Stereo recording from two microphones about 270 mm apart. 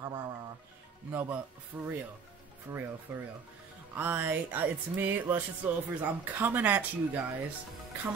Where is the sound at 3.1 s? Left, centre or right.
Centre.